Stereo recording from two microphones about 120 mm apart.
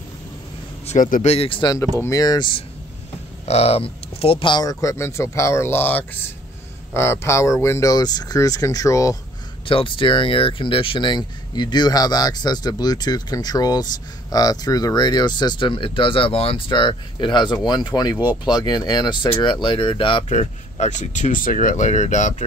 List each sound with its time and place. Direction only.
0.8 s speech: 80° left; by 1.8 s 40° left (ahead or behind)
2.0 s speech: 25° left (ahead or behind)
3.4 s speech: 60° left (ahead or behind); by 4.7 s 40° left (ahead or behind)
4.8 s speech: 25° left (ahead or behind)
9.7 s speech: 45° left (ahead or behind)
20.2 s speech: 75° left (ahead or behind)